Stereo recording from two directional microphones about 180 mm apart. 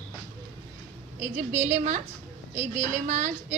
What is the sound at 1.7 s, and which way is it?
Speech, 40° right (ahead or behind).